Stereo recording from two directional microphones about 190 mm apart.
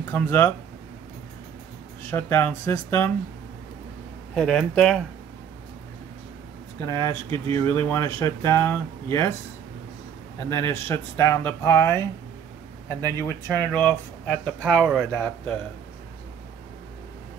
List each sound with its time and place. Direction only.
0.0 s speech: 10° left (ahead or behind)
2.0 s speech: 10° left (ahead or behind)
4.4 s speech: 5° left (ahead or behind)
6.9 s speech: 15° left (ahead or behind)
10.5 s speech: 15° left (ahead or behind)
13.0 s speech: 15° left (ahead or behind)